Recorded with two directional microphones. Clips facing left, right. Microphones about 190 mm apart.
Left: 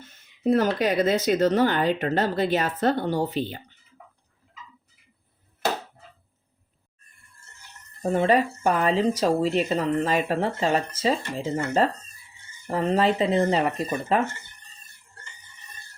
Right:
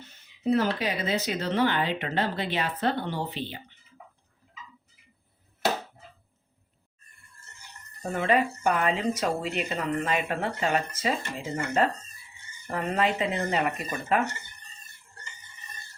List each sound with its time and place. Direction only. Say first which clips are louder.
0.0 s speech: left 4 dB; 45° left (ahead or behind)
8.0 s speech: left 4 dB; 30° left (ahead or behind)